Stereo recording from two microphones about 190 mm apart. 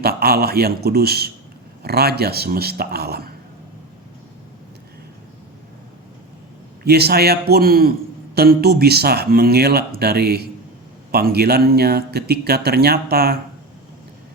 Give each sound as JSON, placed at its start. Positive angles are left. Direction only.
{"t": 0.0, "sound": "speech", "side_deg": -55}
{"t": 6.8, "sound": "speech", "side_deg": -55}